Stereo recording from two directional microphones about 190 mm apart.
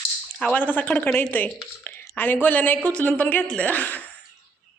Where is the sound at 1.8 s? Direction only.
10° left (ahead or behind).